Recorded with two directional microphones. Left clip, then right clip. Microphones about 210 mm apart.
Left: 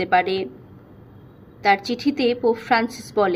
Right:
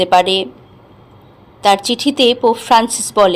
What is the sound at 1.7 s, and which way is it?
Speech, centre (ahead or behind).